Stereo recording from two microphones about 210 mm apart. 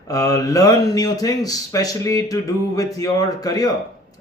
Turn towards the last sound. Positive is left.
turn(degrees=15)  # may be behind; listen again after turning